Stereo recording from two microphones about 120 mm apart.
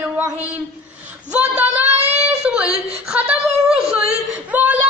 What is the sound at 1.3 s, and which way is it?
Speech, 10° right (ahead or behind).